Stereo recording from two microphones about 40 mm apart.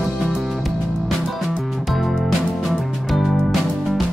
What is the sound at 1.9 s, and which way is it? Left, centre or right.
Music, centre.